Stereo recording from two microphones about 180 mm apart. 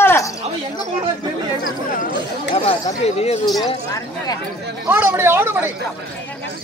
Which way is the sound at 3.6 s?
20° left (ahead or behind).